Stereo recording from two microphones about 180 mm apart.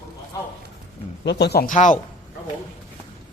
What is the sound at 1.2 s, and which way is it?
Speech, 65° left (ahead or behind).